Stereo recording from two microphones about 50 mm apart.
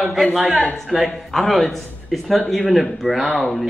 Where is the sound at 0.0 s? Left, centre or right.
Centre.